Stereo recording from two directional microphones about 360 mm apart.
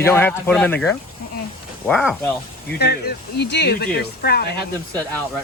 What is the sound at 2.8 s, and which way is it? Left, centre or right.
Speech, left.